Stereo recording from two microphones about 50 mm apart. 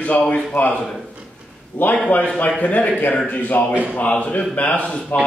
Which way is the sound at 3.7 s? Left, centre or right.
Right.